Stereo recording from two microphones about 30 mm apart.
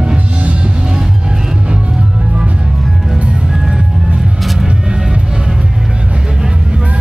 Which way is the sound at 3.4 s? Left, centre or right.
Right.